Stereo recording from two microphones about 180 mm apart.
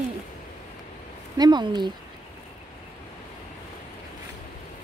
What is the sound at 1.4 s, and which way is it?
Speech, 25° right (ahead or behind).